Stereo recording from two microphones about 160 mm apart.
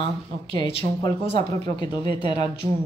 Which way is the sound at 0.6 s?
35° left (ahead or behind).